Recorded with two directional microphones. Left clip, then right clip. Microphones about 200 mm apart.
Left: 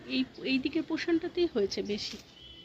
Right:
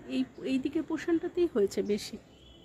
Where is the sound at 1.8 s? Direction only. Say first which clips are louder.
Right 3 dB; 20° right (ahead or behind).